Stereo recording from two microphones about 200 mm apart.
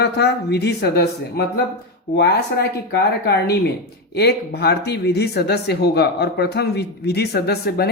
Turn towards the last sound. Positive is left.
turn(degrees=55)  # may be behind; listen again after turning